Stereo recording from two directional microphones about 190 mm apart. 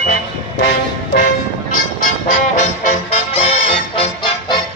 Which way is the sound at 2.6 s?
35° left (ahead or behind).